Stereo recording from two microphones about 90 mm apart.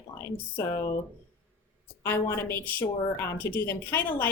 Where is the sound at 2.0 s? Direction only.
25° left (ahead or behind).